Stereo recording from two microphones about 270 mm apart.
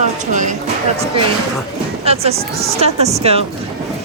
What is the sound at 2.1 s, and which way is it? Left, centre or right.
Speech, right.